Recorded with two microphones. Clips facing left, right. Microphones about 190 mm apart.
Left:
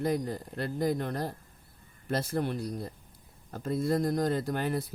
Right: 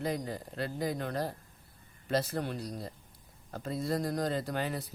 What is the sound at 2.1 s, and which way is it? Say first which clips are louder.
Speech: left 1 dB; 55° left (ahead or behind).